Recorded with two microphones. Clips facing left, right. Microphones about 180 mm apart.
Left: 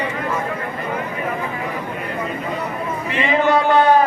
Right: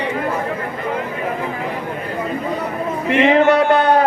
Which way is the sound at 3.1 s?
70° right (ahead or behind).